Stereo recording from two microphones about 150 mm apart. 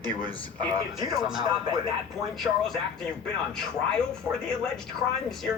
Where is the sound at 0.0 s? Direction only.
30° right (ahead or behind).